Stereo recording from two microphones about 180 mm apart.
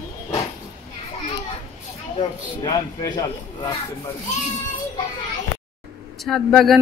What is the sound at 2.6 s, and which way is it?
Speech, 25° left (ahead or behind).